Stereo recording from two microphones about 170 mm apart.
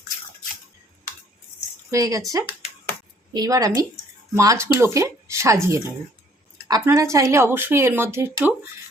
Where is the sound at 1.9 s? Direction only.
20° right (ahead or behind).